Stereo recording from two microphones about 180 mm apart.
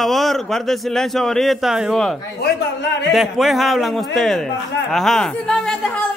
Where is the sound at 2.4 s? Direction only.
70° left (ahead or behind).